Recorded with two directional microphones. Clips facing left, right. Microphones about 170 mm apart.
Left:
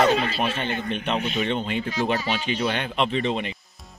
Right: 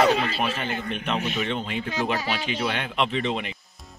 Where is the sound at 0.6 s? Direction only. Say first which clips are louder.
Left 2 dB; 30° left (ahead or behind).